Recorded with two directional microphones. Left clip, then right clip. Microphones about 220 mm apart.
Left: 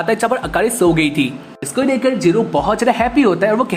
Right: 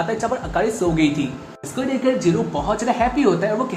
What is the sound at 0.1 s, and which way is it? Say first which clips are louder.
Speech: left 6 dB; 40° left (ahead or behind).